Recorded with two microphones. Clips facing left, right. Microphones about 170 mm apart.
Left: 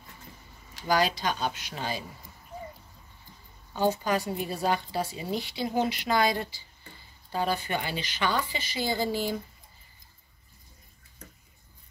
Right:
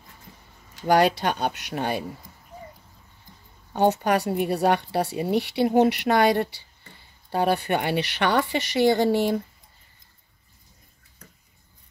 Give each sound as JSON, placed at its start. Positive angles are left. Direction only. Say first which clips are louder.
{"t": 0.8, "sound": "speech", "louder": "right 6 dB", "side_deg": -65}
{"t": 3.7, "sound": "speech", "louder": "right 5 dB", "side_deg": -70}